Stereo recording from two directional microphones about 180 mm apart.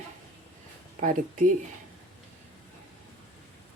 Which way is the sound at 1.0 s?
50° right (ahead or behind).